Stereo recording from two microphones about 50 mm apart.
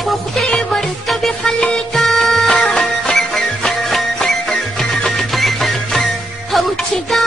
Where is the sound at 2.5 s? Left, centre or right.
Left.